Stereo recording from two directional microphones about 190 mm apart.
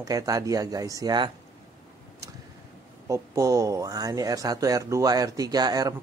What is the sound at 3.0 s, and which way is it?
Speech, 15° right (ahead or behind).